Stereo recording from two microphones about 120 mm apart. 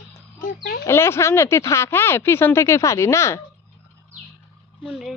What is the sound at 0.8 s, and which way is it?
Speech, 20° left (ahead or behind).